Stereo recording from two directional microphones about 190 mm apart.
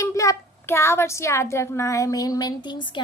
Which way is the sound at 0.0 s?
15° left (ahead or behind).